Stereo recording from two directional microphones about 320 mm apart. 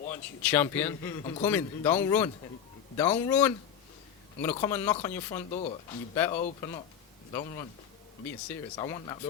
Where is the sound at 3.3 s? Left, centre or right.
Centre.